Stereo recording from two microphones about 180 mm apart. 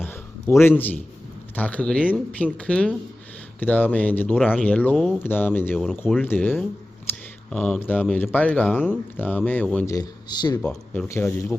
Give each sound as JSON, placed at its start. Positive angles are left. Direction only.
{"t": 0.6, "sound": "speech", "side_deg": 10}
{"t": 9.8, "sound": "speech", "side_deg": 20}
{"t": 10.6, "sound": "speech", "side_deg": 5}